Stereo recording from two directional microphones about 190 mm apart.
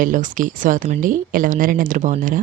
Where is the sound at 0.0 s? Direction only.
45° right (ahead or behind).